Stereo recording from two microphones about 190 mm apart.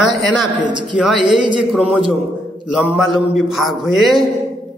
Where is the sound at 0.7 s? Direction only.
25° right (ahead or behind).